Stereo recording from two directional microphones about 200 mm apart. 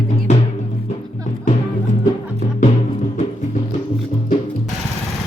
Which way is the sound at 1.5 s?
40° left (ahead or behind).